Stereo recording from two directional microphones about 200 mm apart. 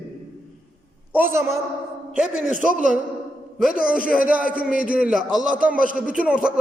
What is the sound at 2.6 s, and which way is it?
Speech, 40° right (ahead or behind).